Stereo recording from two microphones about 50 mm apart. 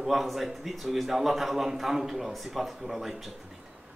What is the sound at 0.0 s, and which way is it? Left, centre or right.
A man's voice, centre.